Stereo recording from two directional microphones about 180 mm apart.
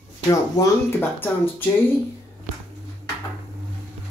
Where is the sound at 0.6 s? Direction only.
20° left (ahead or behind).